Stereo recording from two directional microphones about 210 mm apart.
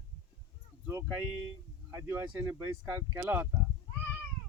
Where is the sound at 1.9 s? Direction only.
10° right (ahead or behind).